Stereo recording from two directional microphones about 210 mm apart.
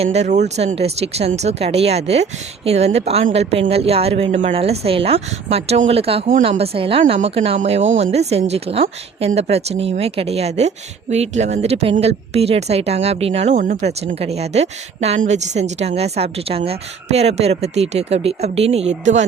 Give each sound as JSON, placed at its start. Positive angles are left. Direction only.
{"t": 0.0, "sound": "speech", "side_deg": -30}